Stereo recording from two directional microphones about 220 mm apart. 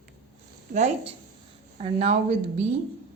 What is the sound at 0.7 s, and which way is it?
A woman's voice, 30° right (ahead or behind).